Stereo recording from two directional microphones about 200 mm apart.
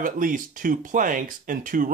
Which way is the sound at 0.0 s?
40° right (ahead or behind).